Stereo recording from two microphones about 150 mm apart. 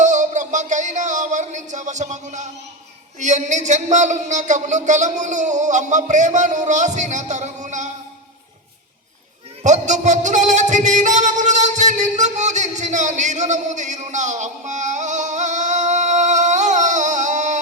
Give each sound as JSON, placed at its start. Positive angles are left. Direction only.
{"t": 0.0, "sound": "music", "side_deg": -55}
{"t": 3.2, "sound": "a man's voice", "side_deg": -55}
{"t": 9.6, "sound": "music", "side_deg": -55}